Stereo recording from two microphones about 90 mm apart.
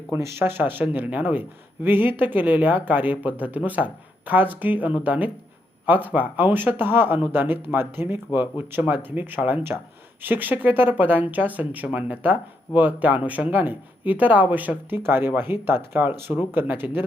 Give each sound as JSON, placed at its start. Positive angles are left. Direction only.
{"t": 0.1, "sound": "speech", "side_deg": -25}